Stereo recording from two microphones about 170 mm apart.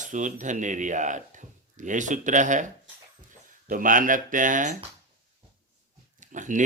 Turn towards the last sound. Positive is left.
turn(degrees=-45)  # may be behind; listen again after turning